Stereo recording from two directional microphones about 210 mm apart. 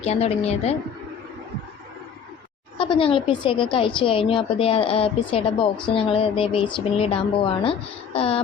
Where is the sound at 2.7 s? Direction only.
25° left (ahead or behind).